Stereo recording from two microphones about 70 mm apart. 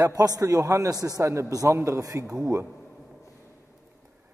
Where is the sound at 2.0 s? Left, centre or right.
Right.